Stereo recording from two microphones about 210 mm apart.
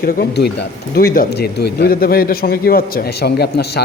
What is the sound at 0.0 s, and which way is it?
Speech, 50° left (ahead or behind).